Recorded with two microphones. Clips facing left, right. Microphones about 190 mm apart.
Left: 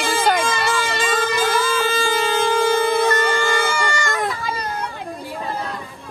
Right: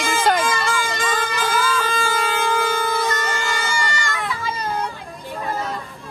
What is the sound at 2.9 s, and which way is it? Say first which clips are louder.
Baby cry: left 5 dB; 60° left (ahead or behind).